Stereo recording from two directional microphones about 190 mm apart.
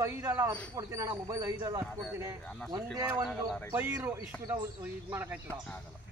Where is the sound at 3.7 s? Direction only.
10° right (ahead or behind).